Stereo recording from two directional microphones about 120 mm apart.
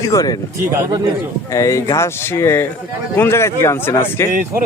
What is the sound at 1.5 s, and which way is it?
Speech, 25° left (ahead or behind).